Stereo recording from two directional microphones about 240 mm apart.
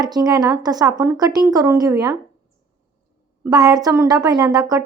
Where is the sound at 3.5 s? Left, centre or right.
Centre.